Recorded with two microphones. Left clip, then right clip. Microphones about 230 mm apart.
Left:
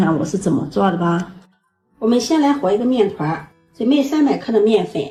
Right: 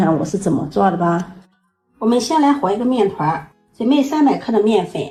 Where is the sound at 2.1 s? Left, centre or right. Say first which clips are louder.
Even; right.